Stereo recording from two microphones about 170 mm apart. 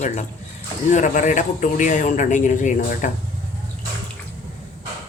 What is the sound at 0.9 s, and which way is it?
A man's voice, 45° left (ahead or behind).